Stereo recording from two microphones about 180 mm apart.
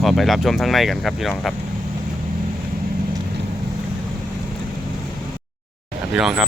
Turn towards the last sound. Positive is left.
turn(degrees=-5)  # may be behind; listen again after turning